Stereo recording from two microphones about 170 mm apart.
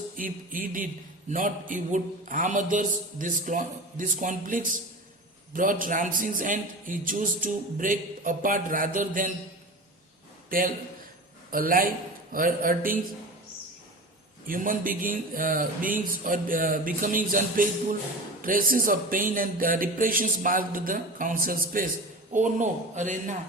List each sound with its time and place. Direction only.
0.2 s a man's voice: 55° right (ahead or behind)
10.5 s a man's voice: 55° right (ahead or behind)
14.4 s a man's voice: 55° right (ahead or behind)